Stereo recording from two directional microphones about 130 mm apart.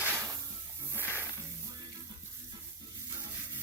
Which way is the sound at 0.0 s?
15° right (ahead or behind).